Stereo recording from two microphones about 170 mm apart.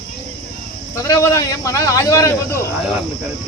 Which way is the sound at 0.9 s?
20° left (ahead or behind).